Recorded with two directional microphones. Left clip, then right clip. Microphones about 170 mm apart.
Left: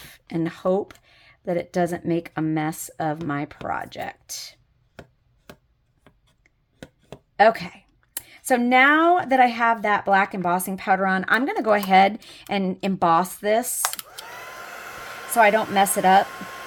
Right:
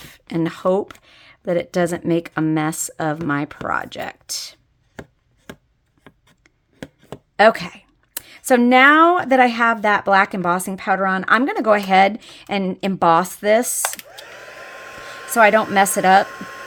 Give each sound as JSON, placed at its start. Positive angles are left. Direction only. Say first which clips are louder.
{"t": 0.0, "sound": "speech", "louder": "right 4 dB", "side_deg": -20}
{"t": 6.4, "sound": "speech", "louder": "right 7 dB", "side_deg": -25}
{"t": 13.8, "sound": "computer keyboard", "louder": "right 2 dB", "side_deg": -5}
{"t": 14.3, "sound": "a sound", "louder": "left 1 dB", "side_deg": 20}
{"t": 15.3, "sound": "speech", "louder": "right 4 dB", "side_deg": -25}
{"t": 16.3, "sound": "hum", "louder": "right 2 dB", "side_deg": 15}